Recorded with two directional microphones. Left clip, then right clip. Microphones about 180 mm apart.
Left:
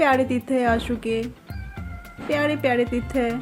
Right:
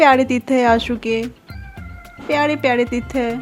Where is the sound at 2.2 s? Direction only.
35° right (ahead or behind).